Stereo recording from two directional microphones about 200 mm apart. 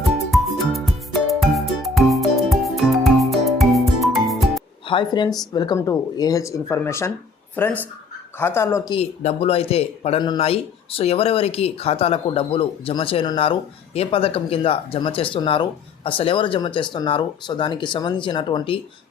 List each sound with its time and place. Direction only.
0.3 s music: centre (ahead or behind)
4.9 s speech: 25° left (ahead or behind)